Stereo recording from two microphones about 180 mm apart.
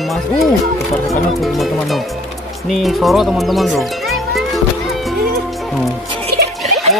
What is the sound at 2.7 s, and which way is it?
Music, centre (ahead or behind).